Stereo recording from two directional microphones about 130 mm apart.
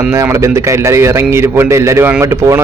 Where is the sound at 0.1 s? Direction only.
20° right (ahead or behind).